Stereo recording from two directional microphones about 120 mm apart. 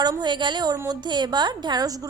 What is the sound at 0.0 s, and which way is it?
Speech, 35° right (ahead or behind).